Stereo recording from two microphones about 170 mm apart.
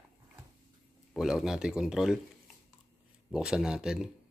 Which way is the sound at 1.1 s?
Centre (ahead or behind).